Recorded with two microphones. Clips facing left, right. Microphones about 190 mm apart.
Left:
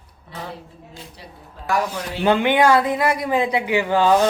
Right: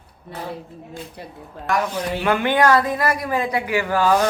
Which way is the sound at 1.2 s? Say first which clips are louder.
Right 5 dB; 55° right (ahead or behind).